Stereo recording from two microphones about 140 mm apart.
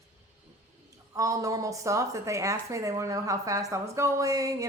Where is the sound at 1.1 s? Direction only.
25° right (ahead or behind).